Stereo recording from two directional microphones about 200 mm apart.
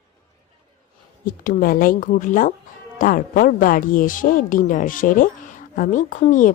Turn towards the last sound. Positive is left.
turn(degrees=40)  # may be behind; listen again after turning